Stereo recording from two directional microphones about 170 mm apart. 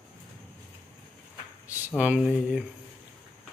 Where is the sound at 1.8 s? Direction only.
10° right (ahead or behind).